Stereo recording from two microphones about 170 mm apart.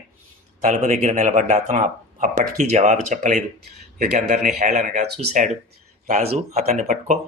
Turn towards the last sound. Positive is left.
turn(degrees=-45)  # may be behind; listen again after turning